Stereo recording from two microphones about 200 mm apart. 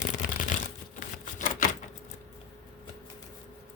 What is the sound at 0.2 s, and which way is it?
Shuffling cards, 40° left (ahead or behind).